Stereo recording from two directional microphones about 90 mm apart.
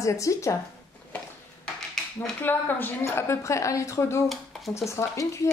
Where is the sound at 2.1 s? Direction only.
25° left (ahead or behind).